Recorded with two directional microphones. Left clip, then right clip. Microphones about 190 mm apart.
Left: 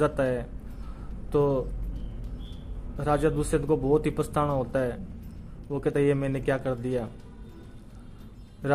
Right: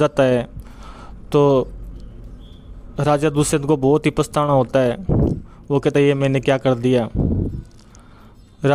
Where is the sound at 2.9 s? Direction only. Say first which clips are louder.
Right 8 dB; 50° right (ahead or behind).